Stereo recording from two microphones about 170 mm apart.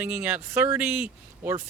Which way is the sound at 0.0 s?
10° right (ahead or behind).